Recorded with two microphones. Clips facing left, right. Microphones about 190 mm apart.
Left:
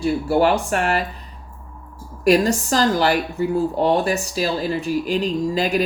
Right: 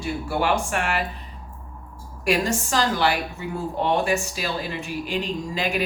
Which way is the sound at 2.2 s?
40° left (ahead or behind).